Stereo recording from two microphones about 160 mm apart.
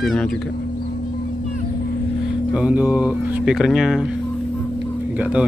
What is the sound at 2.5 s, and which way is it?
A man's voice, 10° right (ahead or behind).